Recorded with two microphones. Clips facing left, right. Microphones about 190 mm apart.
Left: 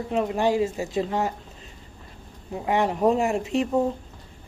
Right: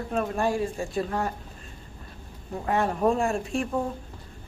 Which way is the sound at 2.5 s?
15° left (ahead or behind).